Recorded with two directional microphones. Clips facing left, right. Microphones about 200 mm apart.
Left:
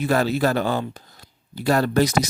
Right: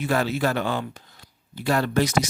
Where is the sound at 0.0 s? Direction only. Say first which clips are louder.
Left 3 dB; 40° left (ahead or behind).